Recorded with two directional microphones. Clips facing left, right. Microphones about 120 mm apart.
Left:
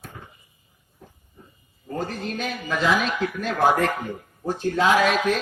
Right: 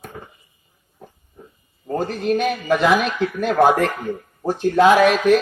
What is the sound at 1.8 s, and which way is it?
A man's voice, 55° right (ahead or behind).